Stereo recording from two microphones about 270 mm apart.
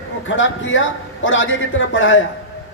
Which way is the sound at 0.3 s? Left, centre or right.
Left.